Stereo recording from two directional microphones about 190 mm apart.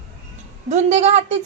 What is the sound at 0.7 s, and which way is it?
Speech, 35° right (ahead or behind).